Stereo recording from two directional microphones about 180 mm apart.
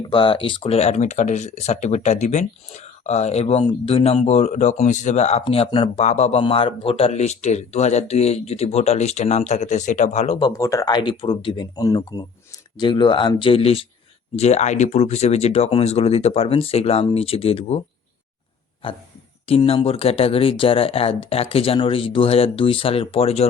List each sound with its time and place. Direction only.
0.0 s speech: 25° left (ahead or behind)
10.3 s speech: 20° left (ahead or behind)
18.8 s speech: 30° left (ahead or behind)